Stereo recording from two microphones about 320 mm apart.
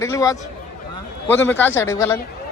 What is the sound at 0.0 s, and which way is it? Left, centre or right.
A man's voice, centre.